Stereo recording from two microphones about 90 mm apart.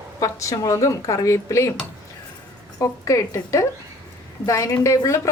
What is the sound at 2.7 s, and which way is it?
Speech, 35° left (ahead or behind).